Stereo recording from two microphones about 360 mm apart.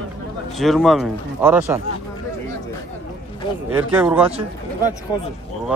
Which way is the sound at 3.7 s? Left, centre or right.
Centre.